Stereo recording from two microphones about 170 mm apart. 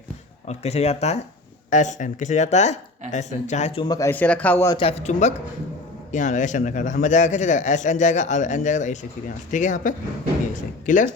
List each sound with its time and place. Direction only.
0.4 s a man's voice: 40° left (ahead or behind)
3.9 s a man's voice: 15° left (ahead or behind)
4.7 s a man's voice: 35° left (ahead or behind); by 11.1 s 50° left (ahead or behind)